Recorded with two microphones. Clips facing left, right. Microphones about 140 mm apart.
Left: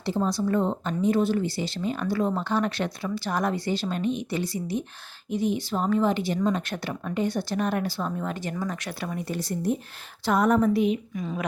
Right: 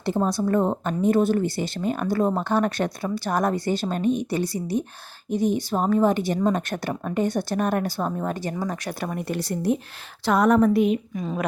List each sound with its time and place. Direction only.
0.0 s speech: 50° right (ahead or behind)
5.7 s speech: 45° right (ahead or behind)
9.0 s speech: 65° right (ahead or behind); by 10.7 s 80° right
10.7 s speech: 50° right (ahead or behind)
11.2 s speech: 35° right (ahead or behind)